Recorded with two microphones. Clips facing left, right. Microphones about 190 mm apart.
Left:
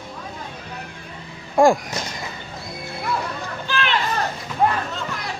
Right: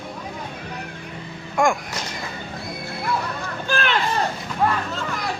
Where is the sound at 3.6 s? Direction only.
45° right (ahead or behind).